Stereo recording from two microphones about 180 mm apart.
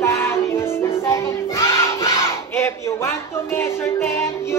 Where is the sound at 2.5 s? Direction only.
15° left (ahead or behind).